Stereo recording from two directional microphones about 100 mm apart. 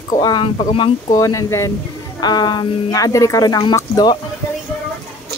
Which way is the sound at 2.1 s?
45° left (ahead or behind).